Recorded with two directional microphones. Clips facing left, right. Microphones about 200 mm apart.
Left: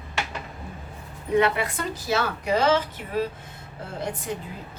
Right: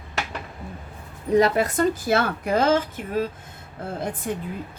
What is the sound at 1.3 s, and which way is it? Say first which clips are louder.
Speech: right 3 dB; 40° right (ahead or behind).